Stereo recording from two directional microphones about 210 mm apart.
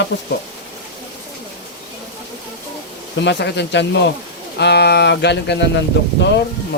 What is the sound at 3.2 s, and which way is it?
Speech, 55° left (ahead or behind).